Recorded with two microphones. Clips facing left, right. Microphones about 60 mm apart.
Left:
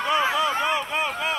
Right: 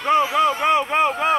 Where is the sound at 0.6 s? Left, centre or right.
Right.